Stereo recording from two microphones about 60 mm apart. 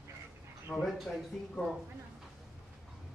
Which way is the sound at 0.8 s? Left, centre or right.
Centre.